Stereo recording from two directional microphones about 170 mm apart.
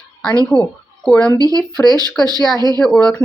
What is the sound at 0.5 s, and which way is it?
Speech, 5° left (ahead or behind).